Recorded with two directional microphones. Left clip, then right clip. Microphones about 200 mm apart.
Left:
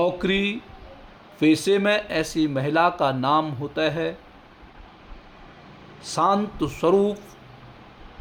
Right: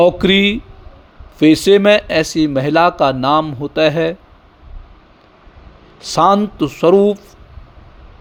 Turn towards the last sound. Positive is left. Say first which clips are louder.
# right 9 dB
turn(degrees=-30)  # may be behind; listen again after turning